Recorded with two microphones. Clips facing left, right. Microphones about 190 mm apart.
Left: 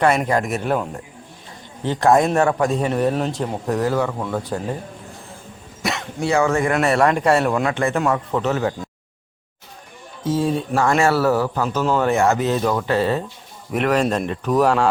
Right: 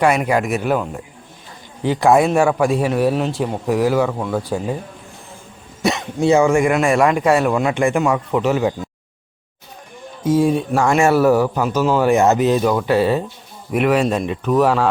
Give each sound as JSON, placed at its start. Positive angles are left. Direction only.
{"t": 0.0, "sound": "a man's voice", "side_deg": -10}
{"t": 5.8, "sound": "a man's voice", "side_deg": -20}
{"t": 10.2, "sound": "a man's voice", "side_deg": -10}
{"t": 12.1, "sound": "a man's voice", "side_deg": -20}